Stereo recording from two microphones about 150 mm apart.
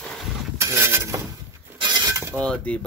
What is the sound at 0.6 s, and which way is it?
Mechanisms, 20° right (ahead or behind).